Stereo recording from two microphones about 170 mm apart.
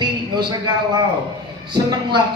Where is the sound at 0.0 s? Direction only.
25° right (ahead or behind).